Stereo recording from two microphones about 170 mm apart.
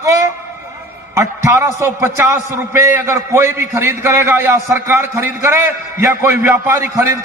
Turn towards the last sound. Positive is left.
turn(degrees=-20)  # may be behind; listen again after turning